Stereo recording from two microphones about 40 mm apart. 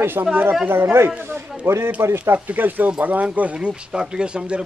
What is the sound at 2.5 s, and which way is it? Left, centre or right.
Speech, right.